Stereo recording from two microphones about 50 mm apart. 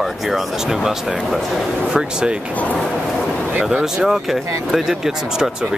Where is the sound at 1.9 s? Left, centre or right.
Centre.